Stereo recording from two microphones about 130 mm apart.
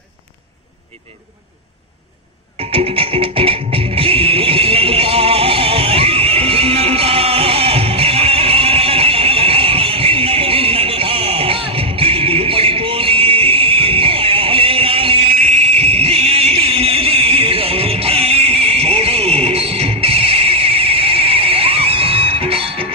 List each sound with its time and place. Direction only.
2.7 s music: 45° right (ahead or behind)